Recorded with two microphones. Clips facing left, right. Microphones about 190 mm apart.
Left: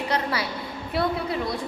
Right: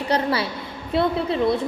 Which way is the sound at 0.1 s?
30° right (ahead or behind).